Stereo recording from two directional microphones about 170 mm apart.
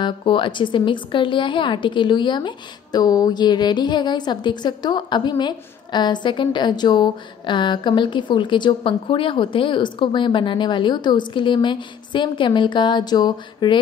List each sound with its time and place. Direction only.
0.0 s a woman's voice: 30° left (ahead or behind)